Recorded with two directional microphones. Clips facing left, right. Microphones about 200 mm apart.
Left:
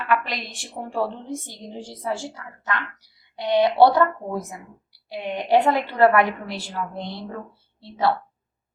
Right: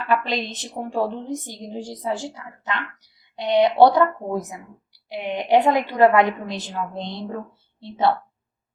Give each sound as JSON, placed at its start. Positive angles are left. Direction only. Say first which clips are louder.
{"t": 0.1, "sound": "a woman's voice", "louder": "right 2 dB", "side_deg": -25}